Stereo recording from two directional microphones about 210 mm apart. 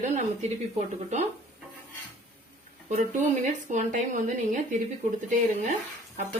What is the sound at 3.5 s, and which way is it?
Speech, 35° right (ahead or behind).